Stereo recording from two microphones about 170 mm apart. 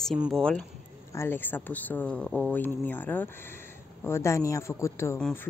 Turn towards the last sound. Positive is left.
turn(degrees=15)  # may be behind; listen again after turning